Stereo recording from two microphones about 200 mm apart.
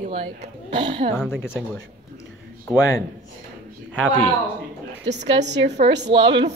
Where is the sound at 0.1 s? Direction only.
30° right (ahead or behind).